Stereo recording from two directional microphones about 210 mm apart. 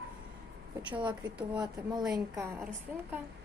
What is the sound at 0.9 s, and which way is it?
Speech, 20° right (ahead or behind).